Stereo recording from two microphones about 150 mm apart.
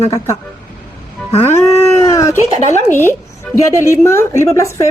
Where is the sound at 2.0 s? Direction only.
20° left (ahead or behind).